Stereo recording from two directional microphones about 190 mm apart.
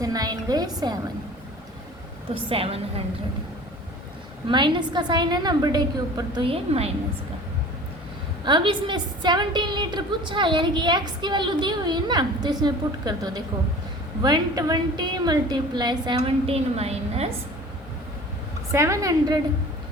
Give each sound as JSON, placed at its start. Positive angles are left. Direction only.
{"t": 0.0, "sound": "a woman's voice", "side_deg": -20}
{"t": 2.3, "sound": "a woman's voice", "side_deg": -30}
{"t": 4.4, "sound": "a woman's voice", "side_deg": -25}
{"t": 8.4, "sound": "a woman's voice", "side_deg": -25}
{"t": 18.7, "sound": "a woman's voice", "side_deg": -15}